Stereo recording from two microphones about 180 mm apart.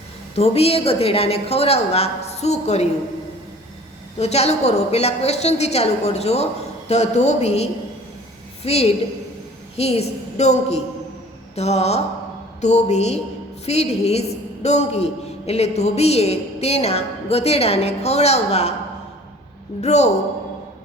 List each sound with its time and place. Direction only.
0.3 s a woman's voice: 35° left (ahead or behind)
4.2 s a woman's voice: 35° left (ahead or behind)
19.8 s a woman's voice: 40° left (ahead or behind)